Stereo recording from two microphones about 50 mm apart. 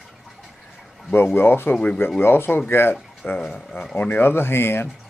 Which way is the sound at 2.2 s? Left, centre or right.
Left.